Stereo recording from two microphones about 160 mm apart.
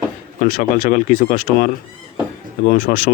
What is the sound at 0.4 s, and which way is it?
Speech, 60° left (ahead or behind).